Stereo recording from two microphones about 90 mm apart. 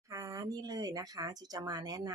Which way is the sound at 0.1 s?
35° right (ahead or behind).